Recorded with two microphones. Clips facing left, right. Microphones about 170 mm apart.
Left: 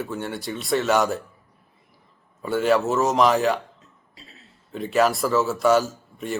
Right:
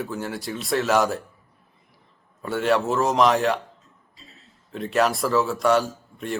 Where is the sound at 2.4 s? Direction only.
Centre (ahead or behind).